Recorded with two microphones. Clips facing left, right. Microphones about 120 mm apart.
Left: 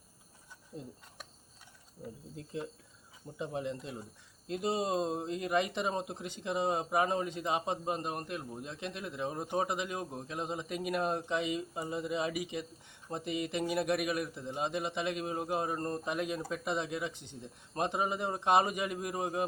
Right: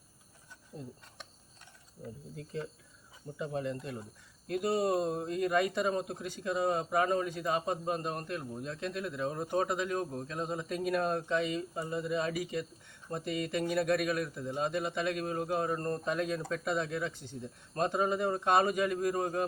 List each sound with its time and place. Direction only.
3.3 s speech: 20° left (ahead or behind)